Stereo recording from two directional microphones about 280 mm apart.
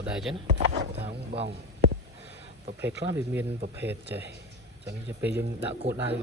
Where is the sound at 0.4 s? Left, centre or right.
Right.